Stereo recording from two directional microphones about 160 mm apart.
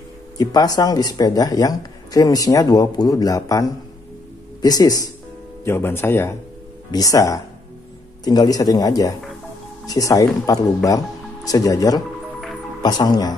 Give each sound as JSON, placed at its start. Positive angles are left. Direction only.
{"t": 0.4, "sound": "speech", "side_deg": 25}